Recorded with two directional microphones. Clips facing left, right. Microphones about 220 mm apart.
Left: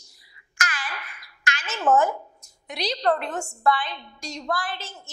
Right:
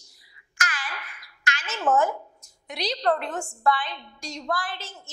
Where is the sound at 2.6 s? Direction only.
10° left (ahead or behind).